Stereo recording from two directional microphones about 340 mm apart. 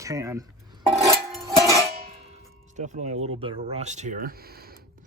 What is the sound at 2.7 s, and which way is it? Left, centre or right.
Speech, right.